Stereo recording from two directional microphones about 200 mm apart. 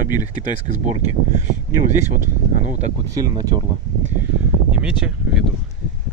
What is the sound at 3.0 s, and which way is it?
Speech, 15° right (ahead or behind).